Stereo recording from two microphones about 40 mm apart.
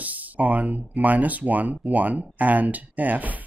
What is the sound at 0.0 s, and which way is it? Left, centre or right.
Speech, right.